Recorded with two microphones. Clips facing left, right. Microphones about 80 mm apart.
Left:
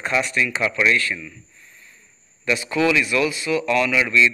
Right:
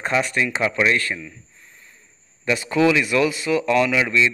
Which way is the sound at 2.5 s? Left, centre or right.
Right.